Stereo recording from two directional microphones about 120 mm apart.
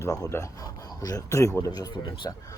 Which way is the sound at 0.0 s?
25° left (ahead or behind).